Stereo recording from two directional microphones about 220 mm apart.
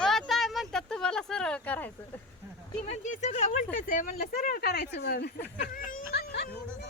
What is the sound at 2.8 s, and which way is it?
Speech, 35° left (ahead or behind).